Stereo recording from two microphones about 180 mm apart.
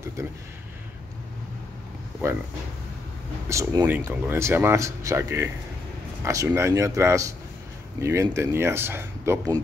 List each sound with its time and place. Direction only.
0.2 s speech: 15° right (ahead or behind)
2.2 s speech: 15° right (ahead or behind)
3.4 s speech: 15° right (ahead or behind)